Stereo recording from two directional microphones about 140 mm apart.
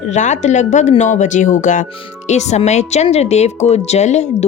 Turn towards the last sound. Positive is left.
turn(degrees=55)  # may be behind; listen again after turning